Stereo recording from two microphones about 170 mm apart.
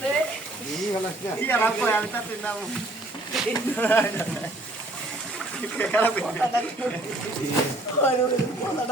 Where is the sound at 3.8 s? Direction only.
10° left (ahead or behind).